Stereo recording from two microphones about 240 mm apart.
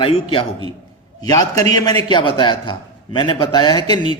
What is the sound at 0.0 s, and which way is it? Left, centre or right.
A man's voice, left.